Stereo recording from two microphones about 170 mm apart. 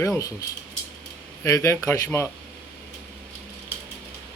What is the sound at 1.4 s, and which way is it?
Speech, 15° left (ahead or behind).